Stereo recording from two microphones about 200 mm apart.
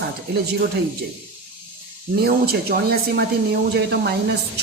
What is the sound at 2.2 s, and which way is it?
A woman's voice, 50° right (ahead or behind).